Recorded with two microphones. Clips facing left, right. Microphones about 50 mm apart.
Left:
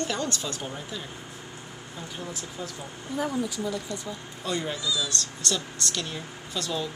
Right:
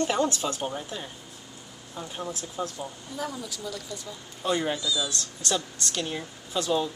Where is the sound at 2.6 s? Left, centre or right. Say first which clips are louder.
Right 6 dB; right.